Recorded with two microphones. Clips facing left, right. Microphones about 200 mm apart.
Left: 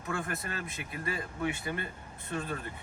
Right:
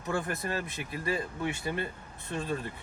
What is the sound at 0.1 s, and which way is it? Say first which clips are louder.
Speech: right 4 dB; 30° right (ahead or behind).